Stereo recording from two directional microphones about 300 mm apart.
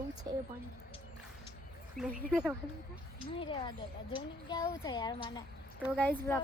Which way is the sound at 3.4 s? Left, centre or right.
Centre.